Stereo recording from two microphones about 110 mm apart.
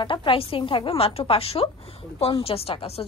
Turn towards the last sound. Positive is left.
turn(degrees=55)  # may be behind; listen again after turning